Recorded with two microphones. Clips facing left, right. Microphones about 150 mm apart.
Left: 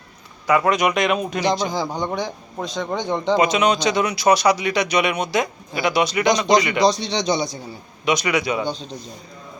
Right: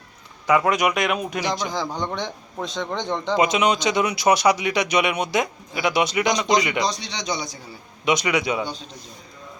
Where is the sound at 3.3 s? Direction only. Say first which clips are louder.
Left 1 dB; 20° right (ahead or behind).